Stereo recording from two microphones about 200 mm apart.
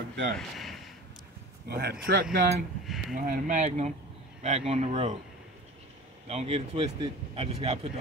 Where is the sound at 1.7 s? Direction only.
55° right (ahead or behind); by 5.1 s 35° right (ahead or behind).